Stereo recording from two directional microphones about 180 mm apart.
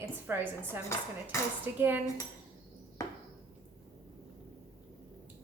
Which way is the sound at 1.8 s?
10° right (ahead or behind).